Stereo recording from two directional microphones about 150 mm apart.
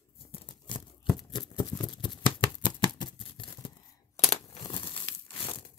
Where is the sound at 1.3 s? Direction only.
30° left (ahead or behind).